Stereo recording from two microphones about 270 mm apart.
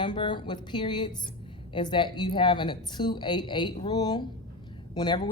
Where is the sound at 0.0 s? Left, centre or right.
Centre.